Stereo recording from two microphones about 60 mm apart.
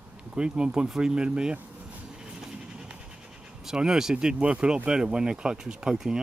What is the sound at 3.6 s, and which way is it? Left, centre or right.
Speech, centre.